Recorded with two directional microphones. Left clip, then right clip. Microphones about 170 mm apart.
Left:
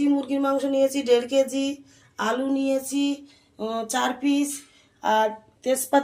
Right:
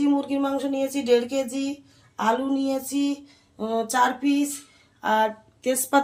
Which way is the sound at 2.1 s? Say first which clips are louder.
Right 1 dB; 15° right (ahead or behind).